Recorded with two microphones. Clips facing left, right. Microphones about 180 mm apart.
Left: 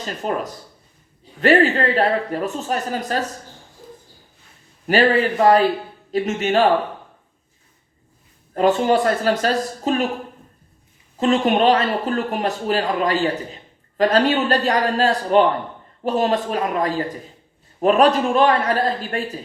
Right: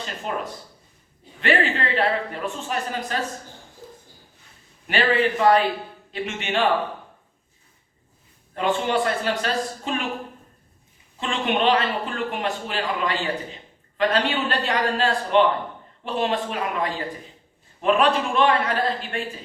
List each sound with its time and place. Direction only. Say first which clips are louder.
0.0 s speech: left 5 dB; 40° left (ahead or behind)
4.9 s speech: left 5 dB; 40° left (ahead or behind)
8.5 s speech: left 6 dB; 40° left (ahead or behind)
11.2 s speech: left 7 dB; 40° left (ahead or behind)